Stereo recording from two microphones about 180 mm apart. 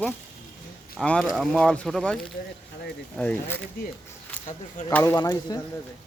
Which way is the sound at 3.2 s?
5° left (ahead or behind).